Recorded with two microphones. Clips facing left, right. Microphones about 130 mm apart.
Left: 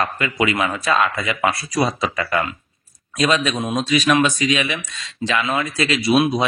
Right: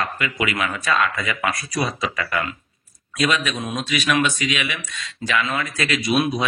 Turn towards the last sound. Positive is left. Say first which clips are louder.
# left 4 dB
turn(degrees=30)  # may be behind; listen again after turning